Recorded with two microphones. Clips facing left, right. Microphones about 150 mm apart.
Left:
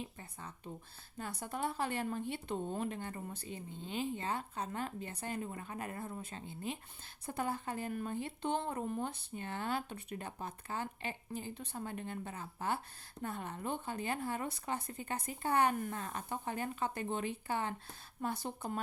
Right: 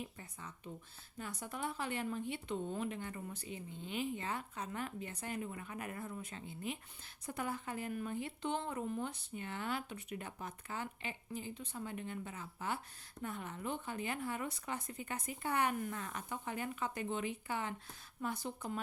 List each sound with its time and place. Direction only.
0.0 s speech: 30° left (ahead or behind)
11.4 s speech: 60° left (ahead or behind)
11.7 s speech: 35° left (ahead or behind)